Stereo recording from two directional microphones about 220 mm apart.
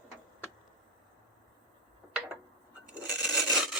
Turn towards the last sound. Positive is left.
turn(degrees=0)  # may be behind; listen again after turning